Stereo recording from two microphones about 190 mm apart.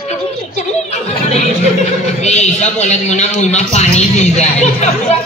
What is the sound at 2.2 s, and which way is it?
A man's voice, 35° left (ahead or behind).